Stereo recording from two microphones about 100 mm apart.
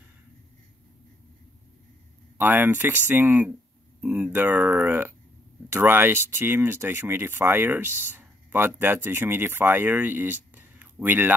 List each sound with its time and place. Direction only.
2.3 s speech: 20° right (ahead or behind)